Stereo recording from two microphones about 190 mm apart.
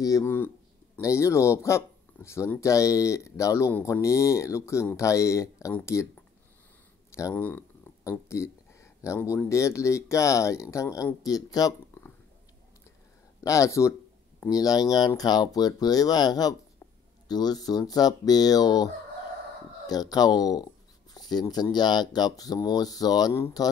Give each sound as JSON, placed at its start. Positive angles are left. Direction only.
{"t": 0.0, "sound": "speech", "side_deg": 15}
{"t": 7.1, "sound": "a sound", "side_deg": 15}
{"t": 8.3, "sound": "speech", "side_deg": 15}
{"t": 13.4, "sound": "speech", "side_deg": 15}
{"t": 19.9, "sound": "speech", "side_deg": 20}